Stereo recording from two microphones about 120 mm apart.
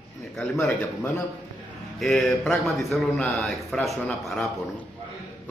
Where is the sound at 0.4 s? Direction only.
10° left (ahead or behind).